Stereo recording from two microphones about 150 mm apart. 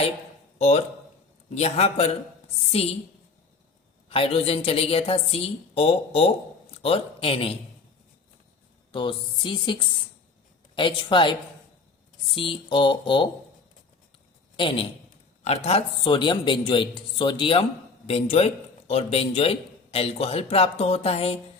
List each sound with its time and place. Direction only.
0.6 s a man's voice: 45° left (ahead or behind)
4.1 s a man's voice: 40° left (ahead or behind)
8.9 s a man's voice: 35° left (ahead or behind)
14.5 s a man's voice: 35° left (ahead or behind)